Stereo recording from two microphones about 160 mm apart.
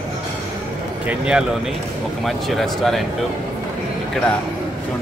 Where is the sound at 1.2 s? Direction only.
5° right (ahead or behind).